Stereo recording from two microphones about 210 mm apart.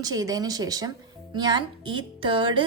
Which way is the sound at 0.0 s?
15° right (ahead or behind).